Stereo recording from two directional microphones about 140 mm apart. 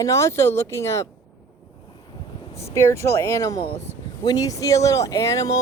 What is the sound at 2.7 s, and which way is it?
Speech, 20° left (ahead or behind).